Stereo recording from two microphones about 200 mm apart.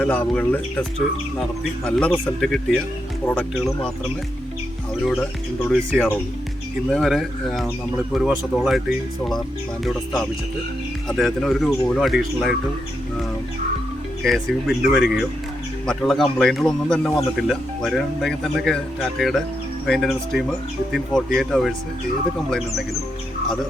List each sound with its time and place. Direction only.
0.0 s speech: 5° left (ahead or behind)
5.6 s speech: centre (ahead or behind)
14.2 s speech: centre (ahead or behind)